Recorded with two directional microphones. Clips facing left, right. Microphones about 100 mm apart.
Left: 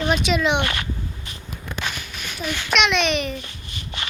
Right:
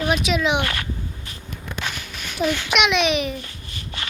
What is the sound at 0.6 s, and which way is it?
Speech, 20° left (ahead or behind).